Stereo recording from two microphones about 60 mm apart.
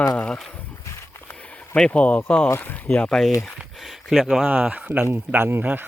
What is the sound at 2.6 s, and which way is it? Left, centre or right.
Speech, left.